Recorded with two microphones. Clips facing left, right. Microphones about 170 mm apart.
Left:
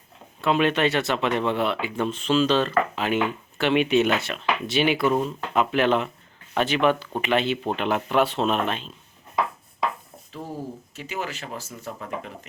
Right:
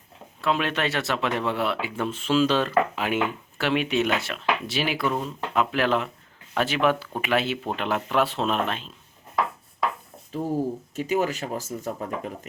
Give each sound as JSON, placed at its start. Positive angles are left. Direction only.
{"t": 0.4, "sound": "speech", "side_deg": 0}
{"t": 10.5, "sound": "speech", "side_deg": -45}